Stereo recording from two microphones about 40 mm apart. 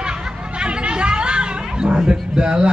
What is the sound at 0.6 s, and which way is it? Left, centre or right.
Chatter, right.